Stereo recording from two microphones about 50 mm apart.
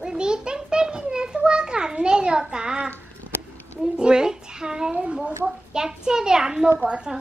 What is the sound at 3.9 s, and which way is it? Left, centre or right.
A woman's voice, centre.